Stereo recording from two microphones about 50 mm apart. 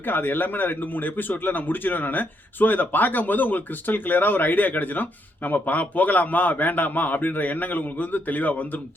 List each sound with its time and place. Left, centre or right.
0.0 s speech: left